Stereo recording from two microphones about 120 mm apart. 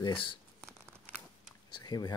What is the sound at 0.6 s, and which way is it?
Crumpling, 25° right (ahead or behind).